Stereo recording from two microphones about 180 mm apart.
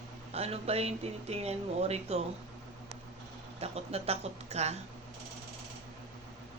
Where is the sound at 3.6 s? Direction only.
35° right (ahead or behind).